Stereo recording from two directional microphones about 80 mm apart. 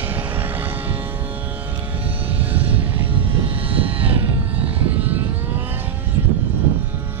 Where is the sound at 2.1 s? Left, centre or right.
Centre.